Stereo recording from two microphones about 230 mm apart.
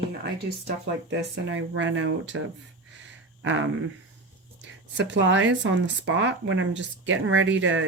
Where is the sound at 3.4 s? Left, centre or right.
Right.